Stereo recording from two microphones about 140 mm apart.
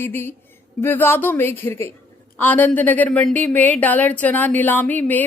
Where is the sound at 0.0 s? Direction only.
15° left (ahead or behind).